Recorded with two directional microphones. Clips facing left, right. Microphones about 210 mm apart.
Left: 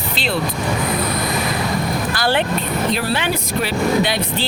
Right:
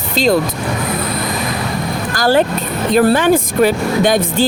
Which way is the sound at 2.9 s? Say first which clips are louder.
Right 10 dB; 45° right (ahead or behind).